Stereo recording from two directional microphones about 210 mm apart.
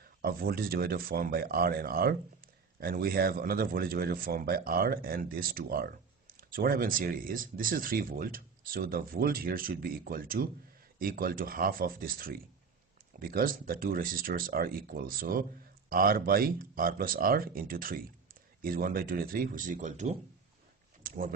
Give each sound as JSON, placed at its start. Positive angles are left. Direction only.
{"t": 0.2, "sound": "speech", "side_deg": -45}